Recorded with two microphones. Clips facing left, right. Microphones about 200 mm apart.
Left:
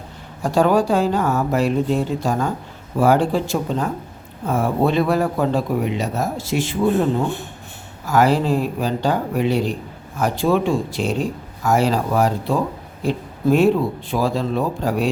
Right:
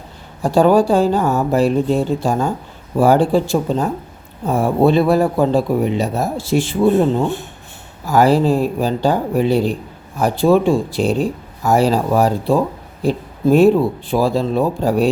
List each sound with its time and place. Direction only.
0.4 s speech: 30° right (ahead or behind)
8.0 s speech: 35° right (ahead or behind)